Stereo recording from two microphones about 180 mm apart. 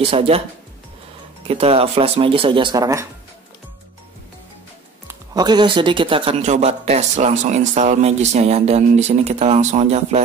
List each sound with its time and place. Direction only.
0.1 s speech: 30° right (ahead or behind)
1.5 s speech: 30° right (ahead or behind)
5.0 s speech: 20° right (ahead or behind); by 10.2 s 40° right (ahead or behind)